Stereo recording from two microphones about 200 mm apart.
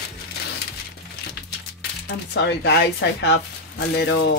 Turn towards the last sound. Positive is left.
turn(degrees=60)  # may be behind; listen again after turning